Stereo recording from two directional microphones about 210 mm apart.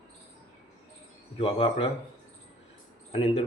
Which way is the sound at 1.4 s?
25° left (ahead or behind).